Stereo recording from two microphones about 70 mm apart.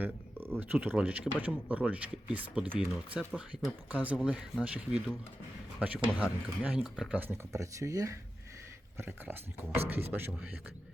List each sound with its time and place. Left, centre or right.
0.0 s a sound: right
0.6 s speech: right
0.9 s speech: centre
6.7 s speech: centre
7.2 s speech: right
9.0 s speech: right